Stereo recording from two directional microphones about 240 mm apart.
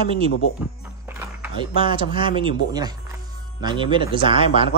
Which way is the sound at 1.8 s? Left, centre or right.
Right.